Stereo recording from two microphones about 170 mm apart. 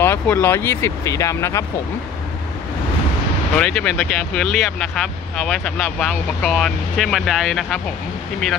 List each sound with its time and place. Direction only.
0.0 s speech: 10° left (ahead or behind)
3.5 s speech: 5° left (ahead or behind)